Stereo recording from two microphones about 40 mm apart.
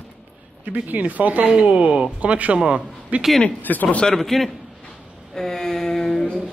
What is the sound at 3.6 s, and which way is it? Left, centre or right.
Speech, left.